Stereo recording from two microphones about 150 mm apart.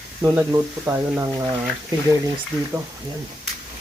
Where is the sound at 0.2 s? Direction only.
15° right (ahead or behind).